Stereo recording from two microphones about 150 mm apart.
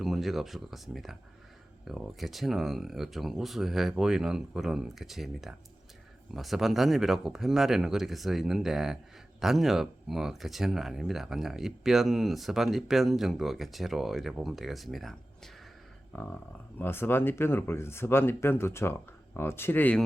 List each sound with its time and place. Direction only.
0.0 s speech: centre (ahead or behind)
16.1 s speech: 10° left (ahead or behind)